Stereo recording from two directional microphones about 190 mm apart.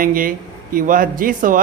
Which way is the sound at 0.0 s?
45° right (ahead or behind).